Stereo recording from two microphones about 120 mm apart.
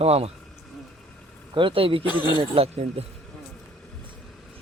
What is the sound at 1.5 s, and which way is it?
Speech, 45° right (ahead or behind).